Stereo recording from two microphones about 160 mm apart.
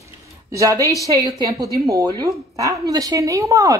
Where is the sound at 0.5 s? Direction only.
20° right (ahead or behind).